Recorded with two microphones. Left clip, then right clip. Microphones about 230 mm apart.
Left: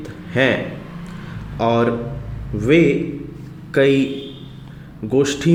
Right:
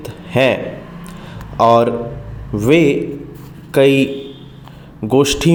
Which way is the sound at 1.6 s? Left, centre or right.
Right.